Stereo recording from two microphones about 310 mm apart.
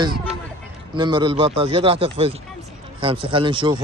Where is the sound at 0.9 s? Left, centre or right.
Centre.